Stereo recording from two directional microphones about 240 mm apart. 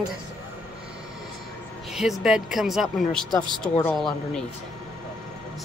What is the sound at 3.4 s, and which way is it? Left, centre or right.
Speech, centre.